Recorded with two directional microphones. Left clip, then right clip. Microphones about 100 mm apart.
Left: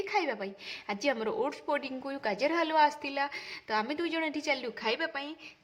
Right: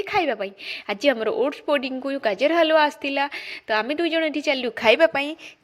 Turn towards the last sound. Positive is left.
turn(degrees=-50)  # may be behind; listen again after turning